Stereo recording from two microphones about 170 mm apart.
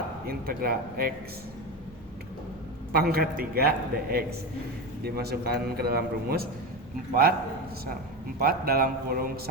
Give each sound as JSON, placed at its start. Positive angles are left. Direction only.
{"t": 0.3, "sound": "a man's voice", "side_deg": -60}
{"t": 2.9, "sound": "a man's voice", "side_deg": -65}
{"t": 8.4, "sound": "a man's voice", "side_deg": -60}